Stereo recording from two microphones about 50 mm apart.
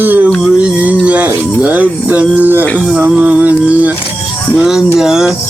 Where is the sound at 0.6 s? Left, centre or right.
Right.